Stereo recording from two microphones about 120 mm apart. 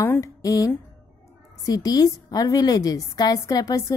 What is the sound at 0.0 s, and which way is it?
A woman's voice, 20° left (ahead or behind).